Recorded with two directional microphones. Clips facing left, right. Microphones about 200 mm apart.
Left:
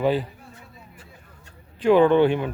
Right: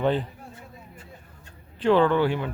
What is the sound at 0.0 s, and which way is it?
Speech, 5° left (ahead or behind).